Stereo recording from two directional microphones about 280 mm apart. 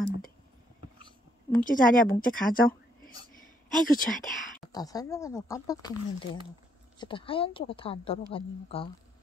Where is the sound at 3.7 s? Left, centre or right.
Left.